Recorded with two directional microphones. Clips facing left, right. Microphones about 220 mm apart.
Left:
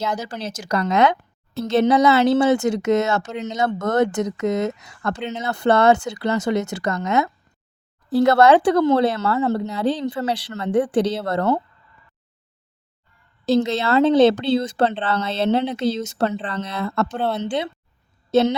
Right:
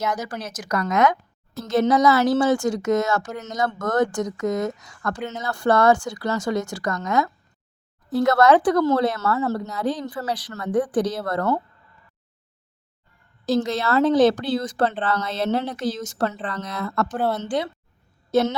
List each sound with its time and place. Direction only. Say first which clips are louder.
0.0 s speech: left 1 dB; 30° left (ahead or behind)
13.4 s speech: left 3 dB; 25° left (ahead or behind)